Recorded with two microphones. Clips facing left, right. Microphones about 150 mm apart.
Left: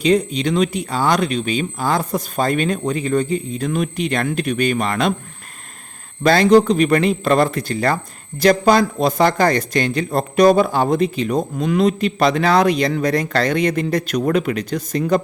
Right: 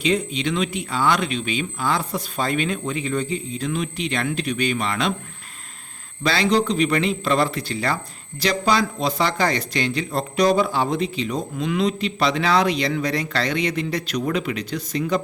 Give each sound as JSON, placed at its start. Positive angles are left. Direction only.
{"t": 0.0, "sound": "a man's voice", "side_deg": 40}
{"t": 6.2, "sound": "a man's voice", "side_deg": 50}